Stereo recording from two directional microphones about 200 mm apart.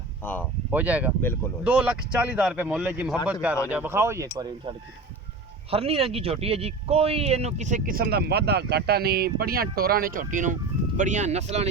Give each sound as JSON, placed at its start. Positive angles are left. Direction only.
{"t": 0.7, "sound": "speech", "side_deg": -10}
{"t": 5.7, "sound": "speech", "side_deg": -30}